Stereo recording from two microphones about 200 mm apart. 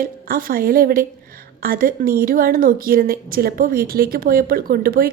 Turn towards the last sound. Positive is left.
turn(degrees=-45)  # may be behind; listen again after turning